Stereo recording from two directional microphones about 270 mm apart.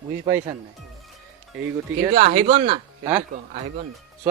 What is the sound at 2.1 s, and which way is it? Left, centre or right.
Speech, right.